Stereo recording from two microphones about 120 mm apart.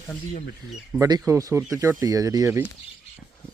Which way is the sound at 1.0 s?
30° right (ahead or behind).